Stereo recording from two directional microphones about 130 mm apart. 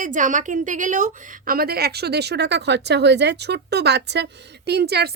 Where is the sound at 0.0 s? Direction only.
80° right.